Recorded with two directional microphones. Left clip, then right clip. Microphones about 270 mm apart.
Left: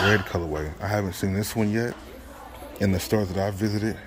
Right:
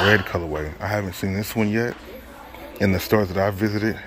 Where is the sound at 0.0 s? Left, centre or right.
Centre.